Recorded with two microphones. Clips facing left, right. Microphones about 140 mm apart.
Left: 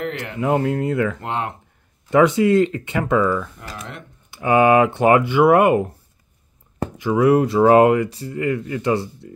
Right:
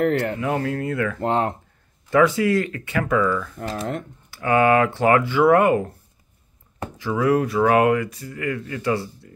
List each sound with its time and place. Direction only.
0.4 s speech: 20° left (ahead or behind)
1.2 s speech: 40° right (ahead or behind)
2.0 s speech: 20° left (ahead or behind)
3.6 s speech: 30° right (ahead or behind)
4.3 s speech: 20° left (ahead or behind)
7.0 s speech: 20° left (ahead or behind)